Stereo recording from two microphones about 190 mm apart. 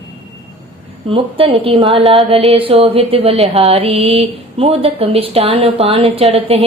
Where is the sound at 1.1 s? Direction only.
30° right (ahead or behind).